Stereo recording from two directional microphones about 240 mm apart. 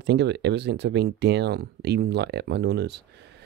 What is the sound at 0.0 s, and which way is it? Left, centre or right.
Speech, right.